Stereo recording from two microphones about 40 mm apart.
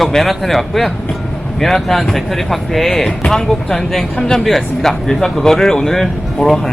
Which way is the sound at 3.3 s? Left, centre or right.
Centre.